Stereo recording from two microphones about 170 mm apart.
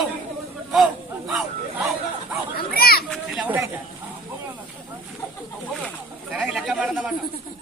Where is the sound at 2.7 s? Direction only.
65° left (ahead or behind).